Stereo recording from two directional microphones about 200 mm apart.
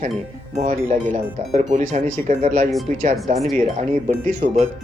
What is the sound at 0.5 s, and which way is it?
Speech, 40° right (ahead or behind).